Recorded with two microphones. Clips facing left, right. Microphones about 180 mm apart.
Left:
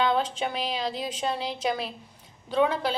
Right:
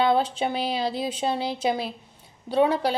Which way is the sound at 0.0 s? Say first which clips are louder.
Right 3 dB; 35° right (ahead or behind).